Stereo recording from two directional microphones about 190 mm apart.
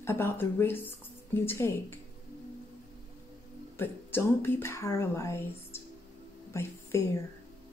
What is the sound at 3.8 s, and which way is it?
Speech, 10° left (ahead or behind).